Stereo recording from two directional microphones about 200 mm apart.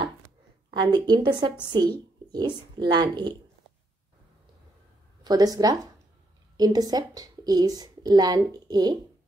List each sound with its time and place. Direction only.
0.7 s speech: 20° right (ahead or behind)
5.2 s speech: 20° right (ahead or behind)